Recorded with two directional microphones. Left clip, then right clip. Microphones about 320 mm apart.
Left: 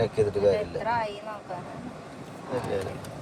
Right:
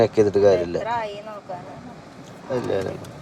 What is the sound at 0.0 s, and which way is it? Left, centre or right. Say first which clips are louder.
Speech: right 7 dB; right.